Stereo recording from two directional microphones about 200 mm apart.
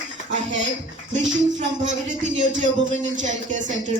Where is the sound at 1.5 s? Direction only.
40° right (ahead or behind).